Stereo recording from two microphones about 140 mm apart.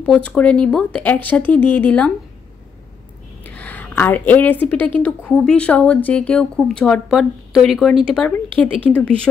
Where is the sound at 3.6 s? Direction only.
10° left (ahead or behind).